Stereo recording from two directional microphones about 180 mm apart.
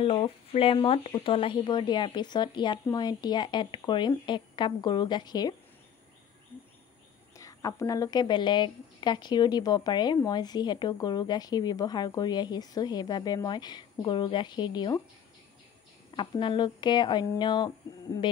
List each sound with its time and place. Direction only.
0.0 s speech: 30° left (ahead or behind)
7.3 s speech: 20° left (ahead or behind)
16.2 s speech: 25° left (ahead or behind)